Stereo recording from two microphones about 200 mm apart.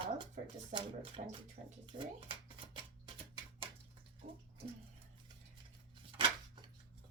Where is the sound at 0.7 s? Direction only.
25° right (ahead or behind).